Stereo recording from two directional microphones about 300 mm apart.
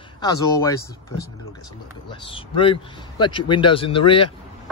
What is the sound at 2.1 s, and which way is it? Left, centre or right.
A man's voice, centre.